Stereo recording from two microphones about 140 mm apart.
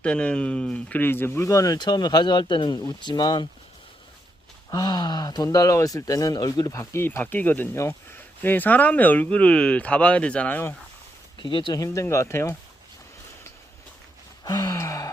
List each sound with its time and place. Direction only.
0.0 s speech: 10° left (ahead or behind); by 3.4 s 30° left (ahead or behind)
4.7 s speech: 30° left (ahead or behind); by 10.8 s 15° left (ahead or behind)
11.3 s speech: 35° left (ahead or behind)
11.8 s speech: 20° left (ahead or behind)
14.4 s gasp: 25° left (ahead or behind)